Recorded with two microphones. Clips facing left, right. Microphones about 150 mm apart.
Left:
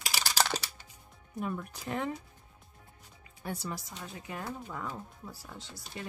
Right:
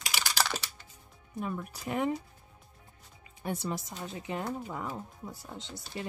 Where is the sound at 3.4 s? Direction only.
20° right (ahead or behind).